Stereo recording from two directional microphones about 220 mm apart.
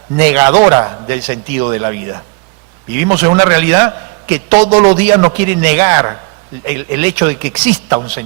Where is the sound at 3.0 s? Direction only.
10° right (ahead or behind).